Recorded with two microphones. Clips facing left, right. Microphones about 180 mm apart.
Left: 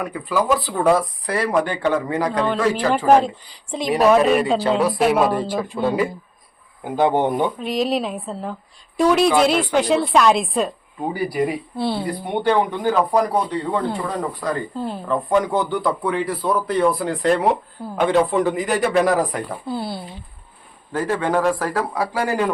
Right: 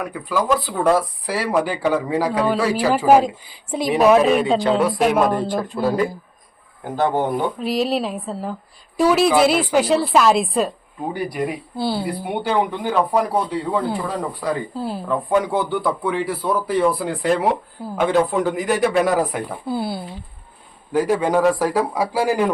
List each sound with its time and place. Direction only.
0.0 s speech: centre (ahead or behind)
5.7 s speech: 5° right (ahead or behind)
6.8 s speech: 15° left (ahead or behind)
7.6 s speech: centre (ahead or behind)